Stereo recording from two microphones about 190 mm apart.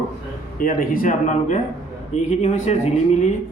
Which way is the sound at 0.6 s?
45° left (ahead or behind).